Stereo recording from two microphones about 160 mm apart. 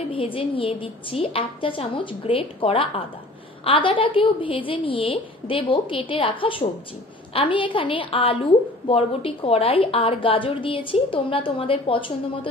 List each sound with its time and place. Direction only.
0.1 s a woman's voice: 35° left (ahead or behind)